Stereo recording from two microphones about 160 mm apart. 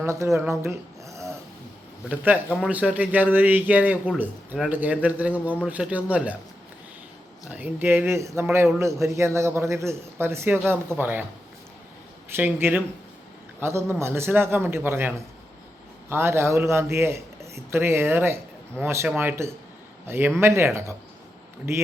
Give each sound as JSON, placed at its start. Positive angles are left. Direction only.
{"t": 0.0, "sound": "a man's voice", "side_deg": -20}
{"t": 7.5, "sound": "a man's voice", "side_deg": -10}
{"t": 12.3, "sound": "a man's voice", "side_deg": -15}